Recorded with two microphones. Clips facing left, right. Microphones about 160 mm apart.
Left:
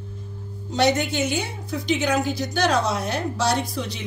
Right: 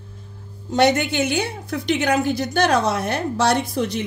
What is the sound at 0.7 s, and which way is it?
A woman's voice, 60° right (ahead or behind).